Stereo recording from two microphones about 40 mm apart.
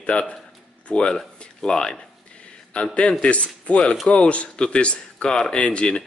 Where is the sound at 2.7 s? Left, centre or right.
Left.